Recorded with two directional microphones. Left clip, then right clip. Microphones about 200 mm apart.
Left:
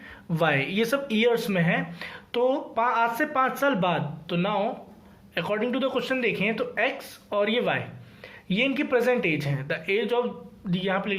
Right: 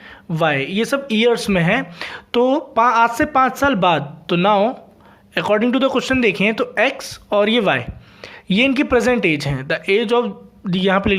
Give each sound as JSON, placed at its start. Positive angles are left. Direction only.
{"t": 0.3, "sound": "speech", "side_deg": -30}